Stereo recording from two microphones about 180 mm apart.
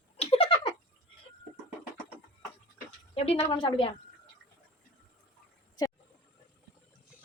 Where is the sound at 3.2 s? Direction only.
30° left (ahead or behind).